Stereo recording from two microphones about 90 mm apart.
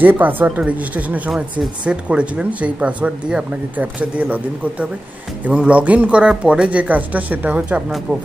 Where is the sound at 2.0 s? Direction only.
15° right (ahead or behind).